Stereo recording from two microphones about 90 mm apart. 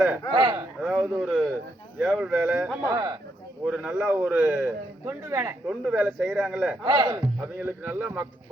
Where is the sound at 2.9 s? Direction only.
45° right (ahead or behind).